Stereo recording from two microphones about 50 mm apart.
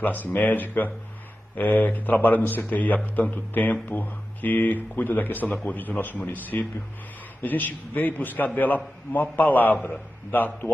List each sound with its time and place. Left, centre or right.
0.0 s a man's voice: left